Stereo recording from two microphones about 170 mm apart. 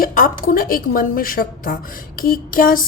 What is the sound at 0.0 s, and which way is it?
A woman's voice, 55° left (ahead or behind).